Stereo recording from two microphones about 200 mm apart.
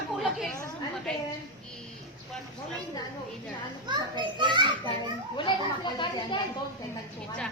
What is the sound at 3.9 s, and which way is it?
Speech, 20° right (ahead or behind).